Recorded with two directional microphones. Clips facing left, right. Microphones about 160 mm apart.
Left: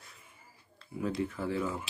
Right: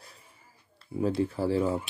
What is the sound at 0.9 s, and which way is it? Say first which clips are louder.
Speech: right 6 dB; 30° right (ahead or behind).